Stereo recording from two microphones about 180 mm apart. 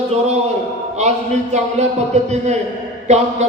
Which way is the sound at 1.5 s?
40° right (ahead or behind).